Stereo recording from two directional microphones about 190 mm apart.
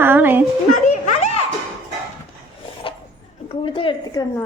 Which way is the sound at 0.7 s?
40° left (ahead or behind).